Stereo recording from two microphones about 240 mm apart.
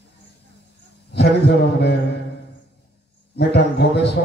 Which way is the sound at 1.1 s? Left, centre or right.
Left.